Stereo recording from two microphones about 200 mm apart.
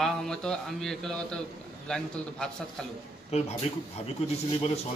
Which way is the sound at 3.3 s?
30° left (ahead or behind).